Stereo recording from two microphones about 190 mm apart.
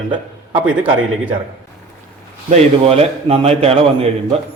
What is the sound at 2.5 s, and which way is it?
A man's voice, 30° right (ahead or behind).